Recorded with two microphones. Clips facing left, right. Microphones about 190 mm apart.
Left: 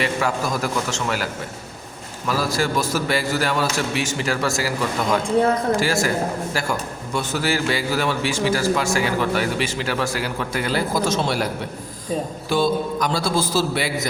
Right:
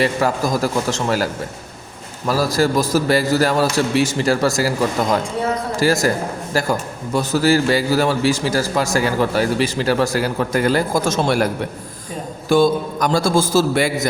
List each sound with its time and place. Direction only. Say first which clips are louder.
0.0 s a man's voice: right 4 dB; 40° right (ahead or behind)
5.8 s a man's voice: right 4 dB; 40° right (ahead or behind)
12.5 s a man's voice: right 6 dB; 50° right (ahead or behind)